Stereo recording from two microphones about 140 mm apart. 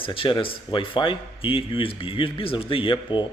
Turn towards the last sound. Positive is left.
turn(degrees=35)  # may be behind; listen again after turning